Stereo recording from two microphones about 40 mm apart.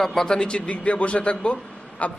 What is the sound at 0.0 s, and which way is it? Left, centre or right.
A man's voice, centre.